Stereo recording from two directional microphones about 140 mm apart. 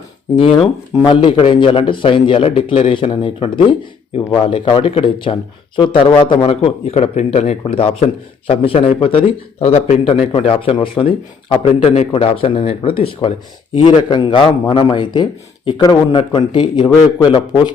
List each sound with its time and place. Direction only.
1.0 s speech: 35° left (ahead or behind); by 7.5 s 55° left (ahead or behind)
7.6 s a man's voice: 40° left (ahead or behind)